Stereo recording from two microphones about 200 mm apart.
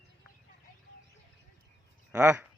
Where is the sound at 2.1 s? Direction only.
10° right (ahead or behind).